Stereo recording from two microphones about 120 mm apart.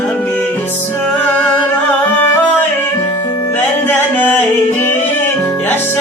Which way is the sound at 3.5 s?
15° left (ahead or behind).